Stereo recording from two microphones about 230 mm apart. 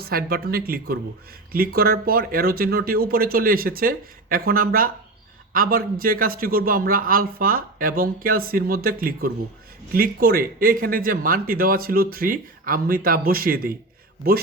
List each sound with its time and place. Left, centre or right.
0.0 s speech: right